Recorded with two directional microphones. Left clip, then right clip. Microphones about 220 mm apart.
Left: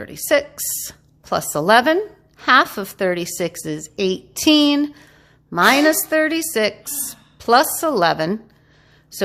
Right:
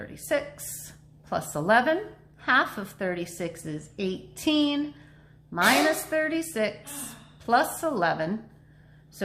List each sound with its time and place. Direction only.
0.0 s a woman's voice: 50° left (ahead or behind)